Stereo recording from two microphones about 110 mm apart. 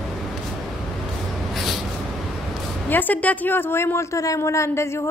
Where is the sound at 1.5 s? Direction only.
Centre (ahead or behind).